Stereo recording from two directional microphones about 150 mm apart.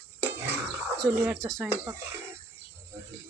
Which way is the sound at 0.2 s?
15° right (ahead or behind).